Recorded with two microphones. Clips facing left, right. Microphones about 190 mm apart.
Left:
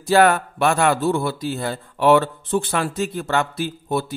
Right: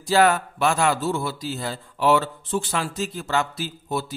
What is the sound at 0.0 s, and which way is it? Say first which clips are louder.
A man's voice: left 3 dB; 55° left (ahead or behind).